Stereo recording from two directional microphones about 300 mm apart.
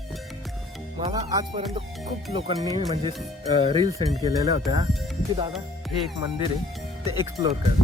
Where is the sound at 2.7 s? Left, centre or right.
Centre.